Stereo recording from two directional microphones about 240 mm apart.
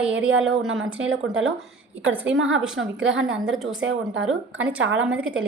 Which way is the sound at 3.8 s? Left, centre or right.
Right.